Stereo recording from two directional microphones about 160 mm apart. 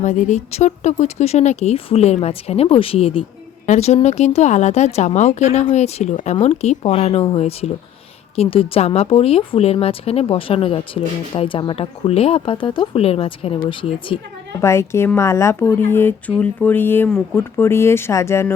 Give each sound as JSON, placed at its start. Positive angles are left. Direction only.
{"t": 0.0, "sound": "speech", "side_deg": 50}
{"t": 14.6, "sound": "speech", "side_deg": 15}